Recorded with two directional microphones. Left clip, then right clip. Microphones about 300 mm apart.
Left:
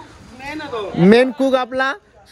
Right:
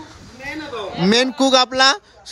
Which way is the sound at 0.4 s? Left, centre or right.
Centre.